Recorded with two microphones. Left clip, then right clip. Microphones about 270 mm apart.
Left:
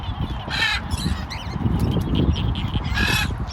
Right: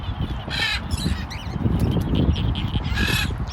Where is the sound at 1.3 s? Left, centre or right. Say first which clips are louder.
Left 1 dB; left.